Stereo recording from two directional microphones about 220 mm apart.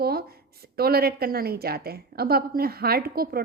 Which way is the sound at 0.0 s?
45° right (ahead or behind).